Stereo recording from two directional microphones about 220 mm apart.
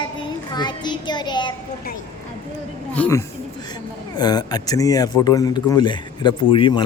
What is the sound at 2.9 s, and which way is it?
A woman's voice, 10° left (ahead or behind).